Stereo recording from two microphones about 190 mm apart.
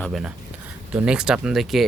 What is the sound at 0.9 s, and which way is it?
Speech, 5° right (ahead or behind).